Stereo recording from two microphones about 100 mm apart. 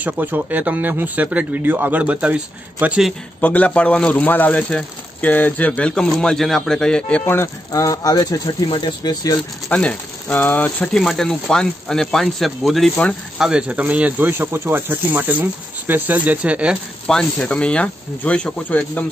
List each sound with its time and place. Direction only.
0.0 s speech: 15° right (ahead or behind)
3.3 s a man's voice: 15° left (ahead or behind)
7.2 s speech: 30° left (ahead or behind)
9.7 s a man's voice: 15° left (ahead or behind); by 16.7 s 10° right (ahead or behind)
17.1 s a man's voice: 10° left (ahead or behind)